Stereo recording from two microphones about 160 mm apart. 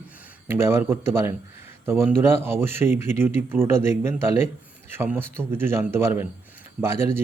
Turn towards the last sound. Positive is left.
turn(degrees=-15)  # may be behind; listen again after turning